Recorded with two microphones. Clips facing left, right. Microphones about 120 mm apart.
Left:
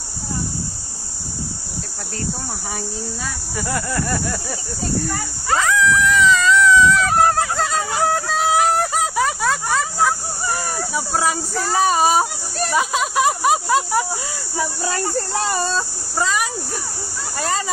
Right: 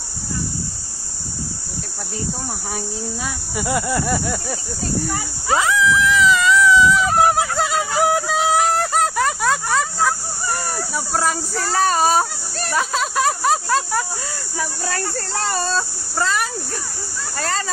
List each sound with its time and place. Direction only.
3.5 s a sound: 15° right (ahead or behind)
5.0 s speech: 5° right (ahead or behind)
5.9 s cat: 5° right (ahead or behind)
11.0 s speech: centre (ahead or behind)
16.2 s speech: 5° left (ahead or behind)